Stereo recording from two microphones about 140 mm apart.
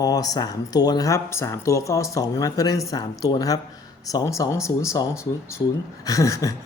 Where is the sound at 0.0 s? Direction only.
25° left (ahead or behind).